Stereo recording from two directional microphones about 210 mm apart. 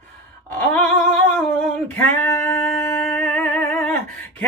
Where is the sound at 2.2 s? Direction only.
15° left (ahead or behind).